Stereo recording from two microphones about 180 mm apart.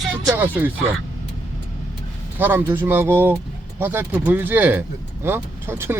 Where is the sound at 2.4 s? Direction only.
10° right (ahead or behind).